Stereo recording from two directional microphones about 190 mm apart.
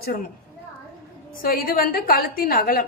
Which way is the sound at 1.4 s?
50° left (ahead or behind).